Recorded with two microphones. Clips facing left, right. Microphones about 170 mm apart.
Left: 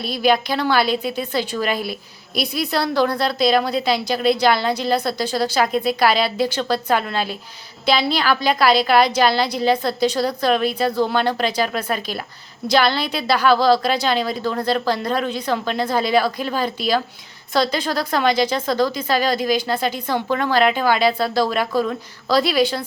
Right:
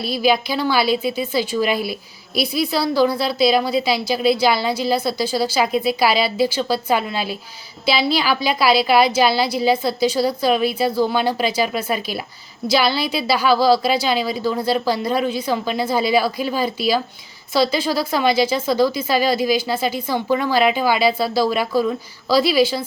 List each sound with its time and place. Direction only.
0.0 s a woman's voice: 5° right (ahead or behind)